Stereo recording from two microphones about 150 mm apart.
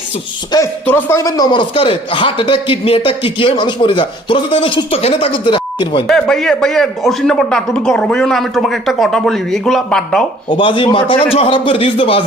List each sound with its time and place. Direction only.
0.5 s speech: 30° left (ahead or behind)
0.9 s a man's voice: 15° left (ahead or behind); by 6.1 s 35° left (ahead or behind)
6.1 s speech: 5° left (ahead or behind)
10.5 s a man's voice: 35° left (ahead or behind)